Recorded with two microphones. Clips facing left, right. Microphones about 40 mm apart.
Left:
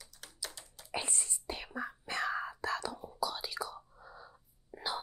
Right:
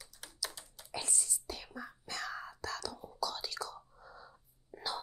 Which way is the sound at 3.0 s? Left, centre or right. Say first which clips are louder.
Left 2 dB; centre.